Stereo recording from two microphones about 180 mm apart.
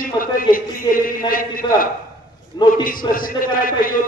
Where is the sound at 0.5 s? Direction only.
50° left (ahead or behind).